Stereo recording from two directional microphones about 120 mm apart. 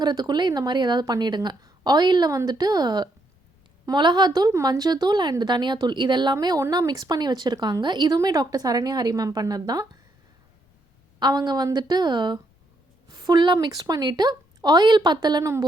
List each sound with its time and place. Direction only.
0.0 s speech: 35° right (ahead or behind)
11.2 s speech: 35° right (ahead or behind)